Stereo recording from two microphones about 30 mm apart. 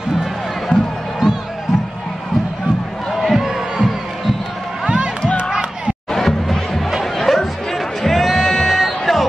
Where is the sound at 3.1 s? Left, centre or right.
Centre.